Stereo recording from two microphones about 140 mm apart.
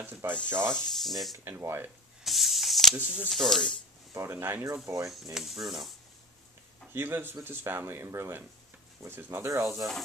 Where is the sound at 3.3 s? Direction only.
Centre (ahead or behind).